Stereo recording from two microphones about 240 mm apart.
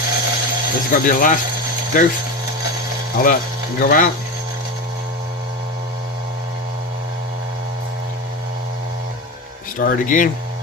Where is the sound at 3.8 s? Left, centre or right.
Left.